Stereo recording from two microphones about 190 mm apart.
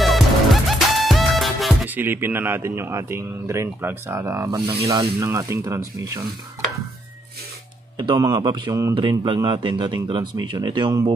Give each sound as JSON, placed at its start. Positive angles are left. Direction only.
{"t": 0.0, "sound": "music", "side_deg": 0}
{"t": 4.8, "sound": "speech", "side_deg": -15}
{"t": 8.0, "sound": "speech", "side_deg": -20}